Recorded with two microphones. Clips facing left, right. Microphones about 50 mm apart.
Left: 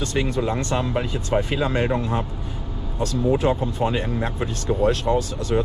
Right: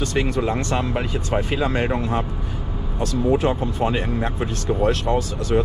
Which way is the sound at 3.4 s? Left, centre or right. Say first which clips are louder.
Even; right.